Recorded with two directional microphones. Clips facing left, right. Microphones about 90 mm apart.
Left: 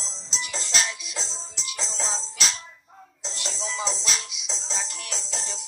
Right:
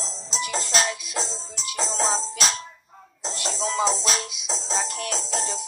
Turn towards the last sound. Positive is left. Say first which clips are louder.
# right 7 dB
turn(degrees=-50)  # may be behind; listen again after turning